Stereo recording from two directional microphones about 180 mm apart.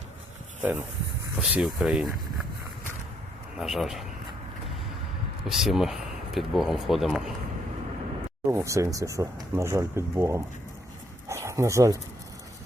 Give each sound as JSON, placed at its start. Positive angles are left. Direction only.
{"t": 1.4, "sound": "speech", "side_deg": -5}
{"t": 3.6, "sound": "speech", "side_deg": 0}
{"t": 5.5, "sound": "speech", "side_deg": 0}
{"t": 8.4, "sound": "speech", "side_deg": -15}
{"t": 11.3, "sound": "dog", "side_deg": -15}